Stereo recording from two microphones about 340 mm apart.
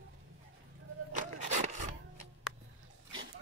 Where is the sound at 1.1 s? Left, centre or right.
Right.